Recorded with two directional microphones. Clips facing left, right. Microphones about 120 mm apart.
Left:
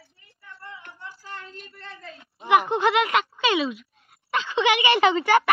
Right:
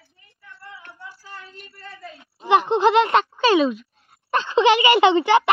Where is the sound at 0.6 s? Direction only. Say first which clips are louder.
Right 1 dB; 5° right (ahead or behind).